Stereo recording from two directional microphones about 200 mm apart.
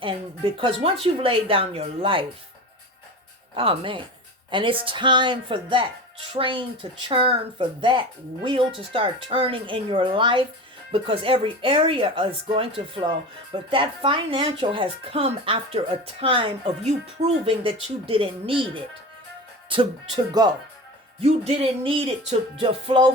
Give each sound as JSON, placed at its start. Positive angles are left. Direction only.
{"t": 0.0, "sound": "speech", "side_deg": -25}
{"t": 3.5, "sound": "speech", "side_deg": -25}
{"t": 21.2, "sound": "speech", "side_deg": -30}